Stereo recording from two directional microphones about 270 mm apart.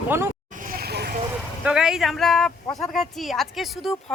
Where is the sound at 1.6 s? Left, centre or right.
Centre.